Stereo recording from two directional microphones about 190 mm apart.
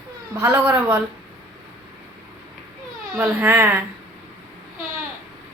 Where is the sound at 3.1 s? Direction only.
10° right (ahead or behind).